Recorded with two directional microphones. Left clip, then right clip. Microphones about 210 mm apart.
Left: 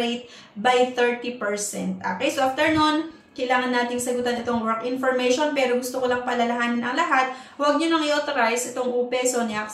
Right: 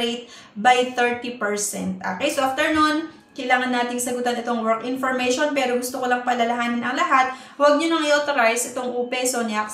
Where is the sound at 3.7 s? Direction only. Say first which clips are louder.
Even; 10° right (ahead or behind).